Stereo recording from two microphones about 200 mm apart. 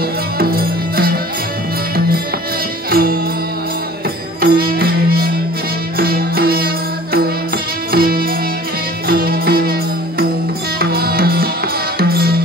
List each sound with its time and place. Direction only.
0.4 s music: 50° right (ahead or behind)
2.9 s music: 50° right (ahead or behind)
4.4 s music: 50° right (ahead or behind)